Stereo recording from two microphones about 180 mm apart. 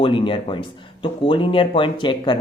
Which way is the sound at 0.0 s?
30° left (ahead or behind).